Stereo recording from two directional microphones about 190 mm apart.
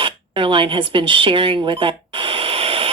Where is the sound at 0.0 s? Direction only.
25° right (ahead or behind).